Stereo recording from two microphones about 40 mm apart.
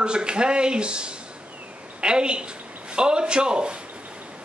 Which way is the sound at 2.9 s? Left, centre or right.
Right.